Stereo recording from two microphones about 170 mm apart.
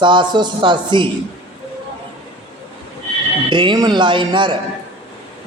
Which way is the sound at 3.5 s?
30° right (ahead or behind).